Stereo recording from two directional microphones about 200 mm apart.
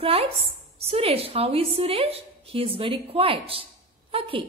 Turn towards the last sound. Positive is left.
turn(degrees=-25)  # may be behind; listen again after turning